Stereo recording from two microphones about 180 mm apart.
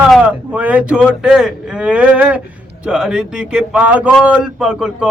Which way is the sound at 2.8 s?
5° right (ahead or behind).